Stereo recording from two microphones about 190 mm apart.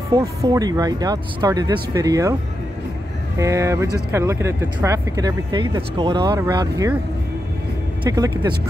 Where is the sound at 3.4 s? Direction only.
15° right (ahead or behind).